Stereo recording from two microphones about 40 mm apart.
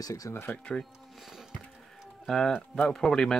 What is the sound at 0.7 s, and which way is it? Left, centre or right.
Speech, left.